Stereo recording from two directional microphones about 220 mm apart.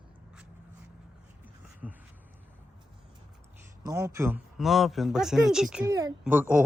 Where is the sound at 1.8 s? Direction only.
5° right (ahead or behind).